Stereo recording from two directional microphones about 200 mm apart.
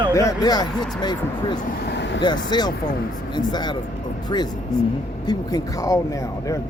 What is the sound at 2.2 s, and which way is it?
Speech, 20° left (ahead or behind).